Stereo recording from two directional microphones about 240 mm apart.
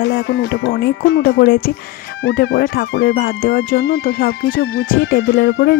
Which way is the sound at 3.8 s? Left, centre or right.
Left.